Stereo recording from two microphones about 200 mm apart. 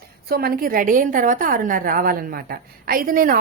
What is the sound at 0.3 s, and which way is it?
A woman's voice, 50° right (ahead or behind).